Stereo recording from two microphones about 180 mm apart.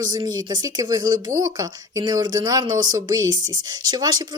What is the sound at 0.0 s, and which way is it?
Speech, 20° right (ahead or behind).